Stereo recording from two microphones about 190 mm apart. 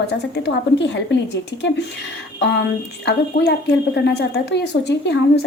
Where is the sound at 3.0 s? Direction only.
60° left (ahead or behind).